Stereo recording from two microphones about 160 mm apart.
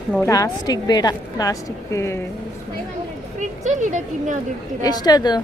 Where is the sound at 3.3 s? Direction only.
50° right (ahead or behind).